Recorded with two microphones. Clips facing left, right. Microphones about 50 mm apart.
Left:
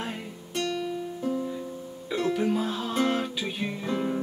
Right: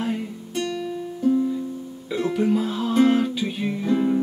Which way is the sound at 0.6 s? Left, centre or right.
Centre.